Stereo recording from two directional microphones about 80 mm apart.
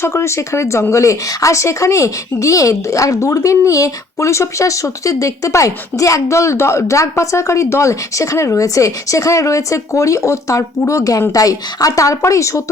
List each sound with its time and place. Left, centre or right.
0.0 s speech: left